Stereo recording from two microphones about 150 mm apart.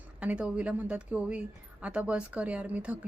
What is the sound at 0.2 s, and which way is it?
A woman's voice, 5° right (ahead or behind).